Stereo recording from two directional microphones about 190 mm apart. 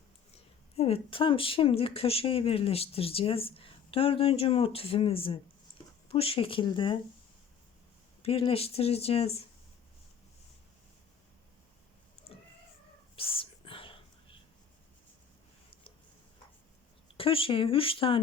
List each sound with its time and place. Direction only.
0.8 s speech: 30° left (ahead or behind)
8.2 s speech: 30° left (ahead or behind)
12.3 s cat: 30° left (ahead or behind)
13.1 s whispering: 30° left (ahead or behind)
17.2 s speech: 30° left (ahead or behind)